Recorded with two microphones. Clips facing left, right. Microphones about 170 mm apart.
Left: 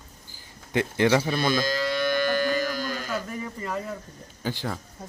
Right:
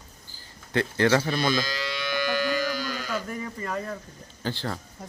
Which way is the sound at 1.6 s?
50° left (ahead or behind).